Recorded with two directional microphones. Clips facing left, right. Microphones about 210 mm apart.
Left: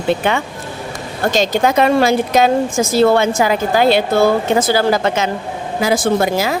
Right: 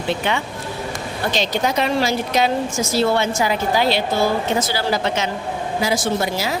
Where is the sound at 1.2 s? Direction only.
45° left (ahead or behind).